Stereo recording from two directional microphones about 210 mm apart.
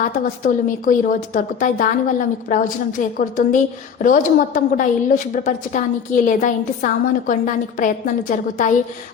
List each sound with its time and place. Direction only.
0.4 s a woman's voice: 40° left (ahead or behind)